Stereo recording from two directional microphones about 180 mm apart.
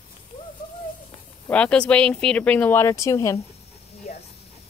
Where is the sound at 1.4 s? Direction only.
5° left (ahead or behind).